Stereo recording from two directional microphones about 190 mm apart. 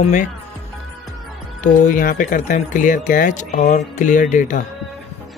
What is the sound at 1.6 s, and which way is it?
Speech, 40° left (ahead or behind).